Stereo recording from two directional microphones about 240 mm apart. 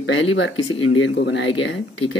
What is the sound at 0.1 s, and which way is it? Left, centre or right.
Speech, left.